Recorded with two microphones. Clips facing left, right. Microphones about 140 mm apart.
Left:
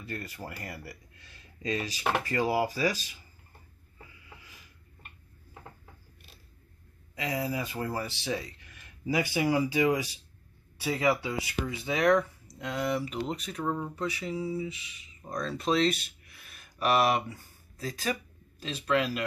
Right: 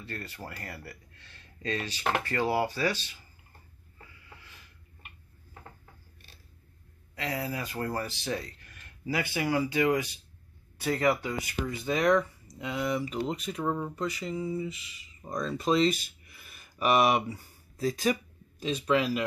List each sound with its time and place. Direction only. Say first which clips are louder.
0.5 s speech: left 1 dB; 15° left (ahead or behind)
7.2 s speech: left 2 dB; 15° left (ahead or behind)
10.8 s speech: right 1 dB; 5° left (ahead or behind); by 18.1 s 25° right (ahead or behind)
18.6 s speech: right 2 dB; 10° right (ahead or behind)